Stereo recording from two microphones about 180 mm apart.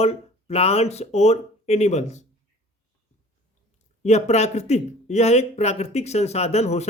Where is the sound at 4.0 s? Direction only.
40° left (ahead or behind).